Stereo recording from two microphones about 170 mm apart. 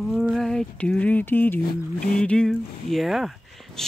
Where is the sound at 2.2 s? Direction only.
5° left (ahead or behind).